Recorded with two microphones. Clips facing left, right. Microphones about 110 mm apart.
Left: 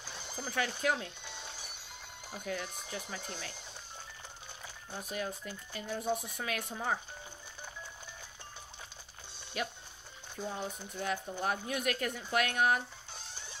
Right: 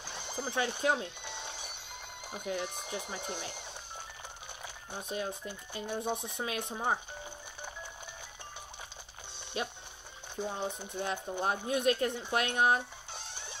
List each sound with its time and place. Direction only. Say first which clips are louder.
0.4 s speech: right 2 dB; 20° right (ahead or behind)
1.2 s a sound: right 4 dB; 60° right (ahead or behind)
2.3 s speech: right 3 dB; 20° right (ahead or behind)
4.9 s speech: right 2 dB; 25° right (ahead or behind)
9.6 s speech: right 1 dB; 25° right (ahead or behind)
13.1 s music: right 3 dB; 60° right (ahead or behind)